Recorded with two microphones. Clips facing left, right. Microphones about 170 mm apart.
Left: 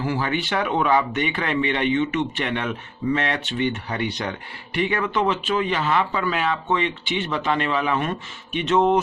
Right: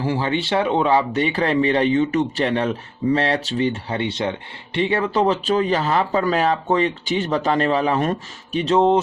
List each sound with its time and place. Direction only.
0.0 s speech: 30° right (ahead or behind)